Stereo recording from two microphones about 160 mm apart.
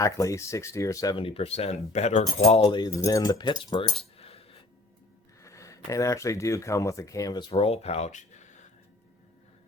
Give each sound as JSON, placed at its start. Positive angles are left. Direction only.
{"t": 0.0, "sound": "speech", "side_deg": 20}
{"t": 1.1, "sound": "speech", "side_deg": 35}
{"t": 2.6, "sound": "speech", "side_deg": 25}
{"t": 4.2, "sound": "a sound", "side_deg": 40}
{"t": 5.4, "sound": "speech", "side_deg": 20}
{"t": 7.5, "sound": "speech", "side_deg": 40}